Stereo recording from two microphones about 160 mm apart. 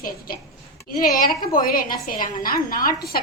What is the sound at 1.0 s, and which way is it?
A woman's voice, 60° left (ahead or behind).